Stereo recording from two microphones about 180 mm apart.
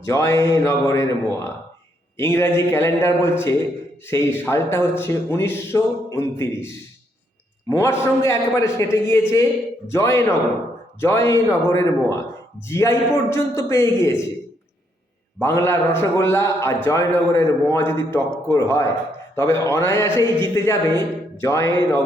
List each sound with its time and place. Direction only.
0.0 s speech: 15° left (ahead or behind)
15.4 s speech: 15° left (ahead or behind)